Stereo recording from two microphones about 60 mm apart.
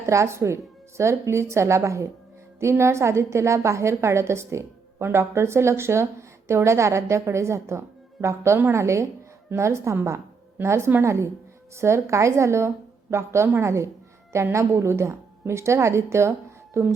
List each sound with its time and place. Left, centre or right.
0.0 s a woman's voice: right